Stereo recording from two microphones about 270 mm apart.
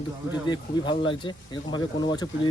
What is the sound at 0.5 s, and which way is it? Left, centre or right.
Speech, centre.